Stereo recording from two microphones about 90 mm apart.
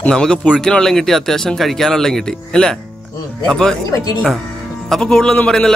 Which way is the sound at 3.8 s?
40° left (ahead or behind).